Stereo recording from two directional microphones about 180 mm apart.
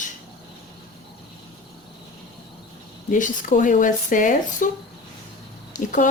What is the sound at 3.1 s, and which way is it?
A woman's voice, 45° left (ahead or behind).